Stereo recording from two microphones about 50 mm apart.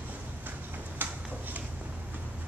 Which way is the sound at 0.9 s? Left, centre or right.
Right.